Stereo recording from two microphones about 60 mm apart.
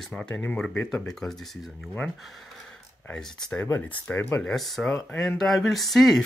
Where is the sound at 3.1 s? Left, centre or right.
Centre.